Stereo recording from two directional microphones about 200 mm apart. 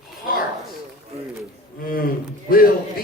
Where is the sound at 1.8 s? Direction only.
45° left (ahead or behind).